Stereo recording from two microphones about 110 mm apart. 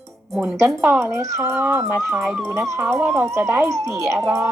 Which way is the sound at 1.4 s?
25° right (ahead or behind).